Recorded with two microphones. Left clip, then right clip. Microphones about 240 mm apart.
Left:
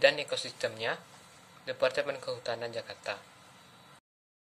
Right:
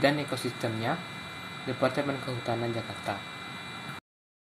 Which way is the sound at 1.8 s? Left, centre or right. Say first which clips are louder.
Right 1 dB; centre.